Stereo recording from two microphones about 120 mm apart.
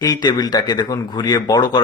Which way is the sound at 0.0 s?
35° left (ahead or behind).